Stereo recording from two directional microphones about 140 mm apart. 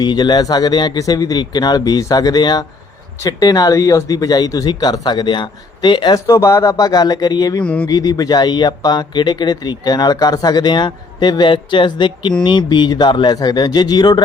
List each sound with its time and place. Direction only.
0.0 s speech: 30° left (ahead or behind)
7.6 s speech: 10° left (ahead or behind)
7.9 s speech: 25° left (ahead or behind)